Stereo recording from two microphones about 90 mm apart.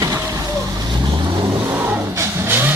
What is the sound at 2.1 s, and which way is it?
Vehicle, 30° right (ahead or behind).